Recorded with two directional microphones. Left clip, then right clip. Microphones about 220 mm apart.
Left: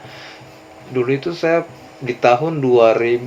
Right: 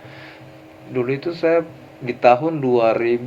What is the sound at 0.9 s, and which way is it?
Speech, 25° right (ahead or behind).